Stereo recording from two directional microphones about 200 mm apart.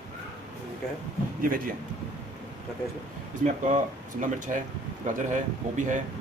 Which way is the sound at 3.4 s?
40° right (ahead or behind).